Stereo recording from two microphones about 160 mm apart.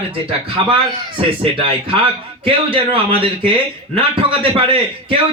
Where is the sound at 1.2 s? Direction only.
35° right (ahead or behind).